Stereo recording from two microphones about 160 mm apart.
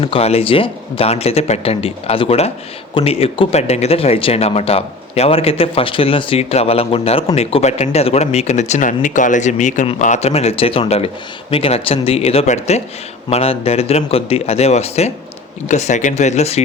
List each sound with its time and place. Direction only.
0.0 s speech: 40° left (ahead or behind)